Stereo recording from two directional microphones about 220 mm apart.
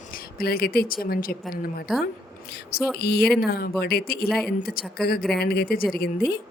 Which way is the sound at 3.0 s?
45° left (ahead or behind).